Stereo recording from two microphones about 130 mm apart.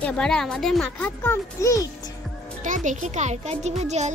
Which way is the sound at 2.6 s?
75° right (ahead or behind).